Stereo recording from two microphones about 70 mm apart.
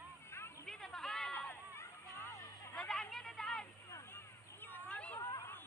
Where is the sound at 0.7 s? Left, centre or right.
Centre.